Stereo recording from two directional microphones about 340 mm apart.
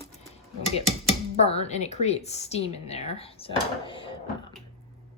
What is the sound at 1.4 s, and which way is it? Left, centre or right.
Speech, centre.